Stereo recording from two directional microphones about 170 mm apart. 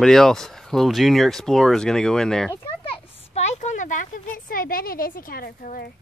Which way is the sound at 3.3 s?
40° left (ahead or behind).